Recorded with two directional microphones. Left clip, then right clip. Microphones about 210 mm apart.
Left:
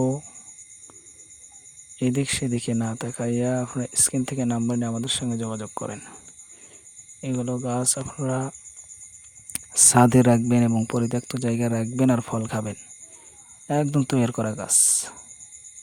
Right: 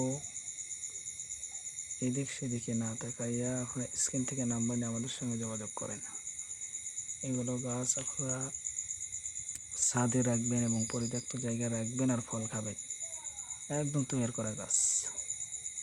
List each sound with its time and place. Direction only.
2.0 s speech: 50° left (ahead or behind)
7.2 s speech: 45° left (ahead or behind)